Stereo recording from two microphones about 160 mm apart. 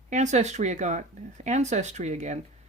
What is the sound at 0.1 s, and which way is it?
Speech, 45° right (ahead or behind).